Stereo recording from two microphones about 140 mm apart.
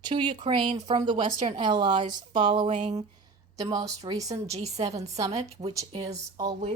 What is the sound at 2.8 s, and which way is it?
Speech, 50° right (ahead or behind).